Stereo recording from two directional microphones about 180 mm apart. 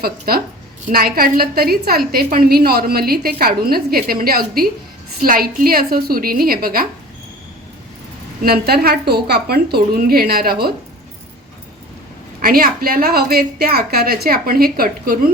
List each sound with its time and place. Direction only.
0.0 s a woman's voice: 55° right (ahead or behind)
8.4 s a woman's voice: 60° right (ahead or behind)
12.4 s a woman's voice: 55° right (ahead or behind)